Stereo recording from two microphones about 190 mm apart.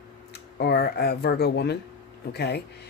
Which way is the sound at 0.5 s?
60° left (ahead or behind).